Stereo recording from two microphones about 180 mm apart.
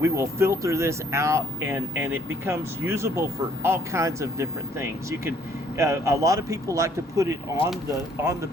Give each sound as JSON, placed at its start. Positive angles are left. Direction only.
{"t": 0.0, "sound": "speech", "side_deg": -15}